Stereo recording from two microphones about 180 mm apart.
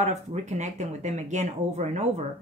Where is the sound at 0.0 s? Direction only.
40° right (ahead or behind).